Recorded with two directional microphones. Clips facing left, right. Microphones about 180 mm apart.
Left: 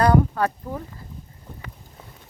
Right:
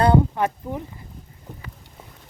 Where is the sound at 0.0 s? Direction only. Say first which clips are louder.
Even; 20° right (ahead or behind).